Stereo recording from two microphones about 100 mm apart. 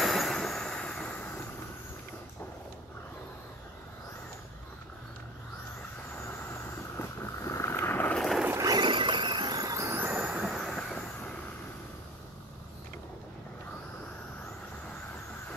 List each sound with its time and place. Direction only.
0.0 s vehicle: centre (ahead or behind); by 1.4 s 20° left (ahead or behind)
6.2 s vehicle: 25° left (ahead or behind)
8.2 s boat: centre (ahead or behind)
8.5 s vehicle: 40° right (ahead or behind); by 10.2 s 20° right (ahead or behind)
10.2 s train: 5° right (ahead or behind)